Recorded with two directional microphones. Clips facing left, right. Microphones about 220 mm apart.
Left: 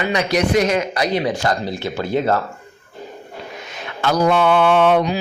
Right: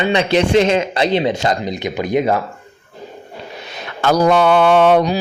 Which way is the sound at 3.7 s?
40° right (ahead or behind).